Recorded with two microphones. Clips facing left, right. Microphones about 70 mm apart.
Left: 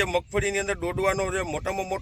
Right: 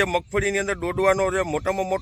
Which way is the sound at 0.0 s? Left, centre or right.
Right.